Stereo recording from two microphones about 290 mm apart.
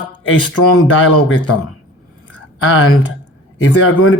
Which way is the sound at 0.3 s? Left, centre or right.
Left.